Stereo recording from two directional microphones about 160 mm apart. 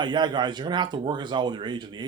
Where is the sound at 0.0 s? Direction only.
30° right (ahead or behind).